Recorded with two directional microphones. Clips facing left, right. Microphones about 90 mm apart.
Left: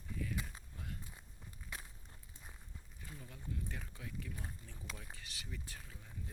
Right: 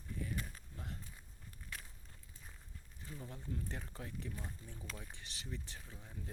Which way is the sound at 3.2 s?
35° right (ahead or behind).